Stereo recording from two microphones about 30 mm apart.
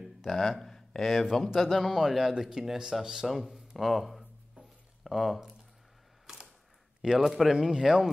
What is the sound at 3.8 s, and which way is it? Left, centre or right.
Speech, centre.